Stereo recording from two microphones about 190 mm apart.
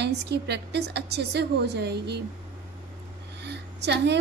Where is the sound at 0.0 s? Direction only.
60° right (ahead or behind).